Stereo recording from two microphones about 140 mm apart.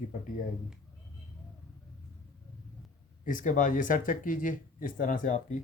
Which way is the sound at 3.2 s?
70° left (ahead or behind).